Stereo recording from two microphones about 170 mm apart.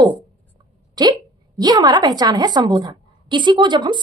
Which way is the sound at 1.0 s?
25° right (ahead or behind).